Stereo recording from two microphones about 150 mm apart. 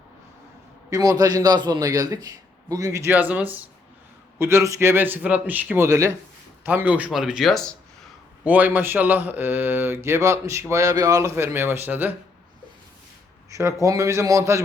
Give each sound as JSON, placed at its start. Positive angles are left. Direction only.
{"t": 0.9, "sound": "a man's voice", "side_deg": -25}
{"t": 6.7, "sound": "speech", "side_deg": -10}
{"t": 8.4, "sound": "speech", "side_deg": -10}
{"t": 13.5, "sound": "a man's voice", "side_deg": -20}